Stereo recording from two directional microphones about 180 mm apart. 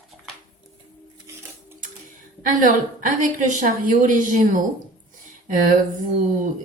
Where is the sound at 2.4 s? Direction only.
45° right (ahead or behind).